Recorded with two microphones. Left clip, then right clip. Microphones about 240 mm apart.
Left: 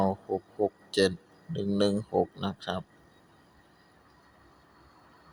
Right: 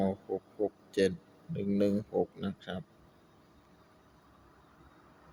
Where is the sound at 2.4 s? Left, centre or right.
Left.